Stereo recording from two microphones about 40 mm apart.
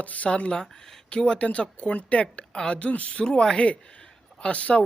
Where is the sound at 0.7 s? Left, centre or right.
Centre.